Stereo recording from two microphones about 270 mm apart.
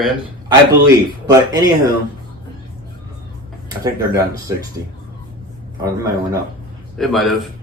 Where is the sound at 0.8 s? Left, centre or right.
Centre.